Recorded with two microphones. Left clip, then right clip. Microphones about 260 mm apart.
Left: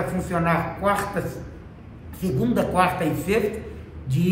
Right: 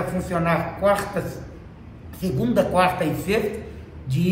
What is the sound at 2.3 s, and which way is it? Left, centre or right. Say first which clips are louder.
A man's voice: right 2 dB; centre.